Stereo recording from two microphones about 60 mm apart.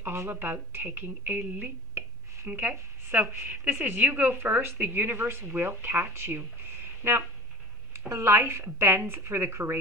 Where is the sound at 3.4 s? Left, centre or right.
Right.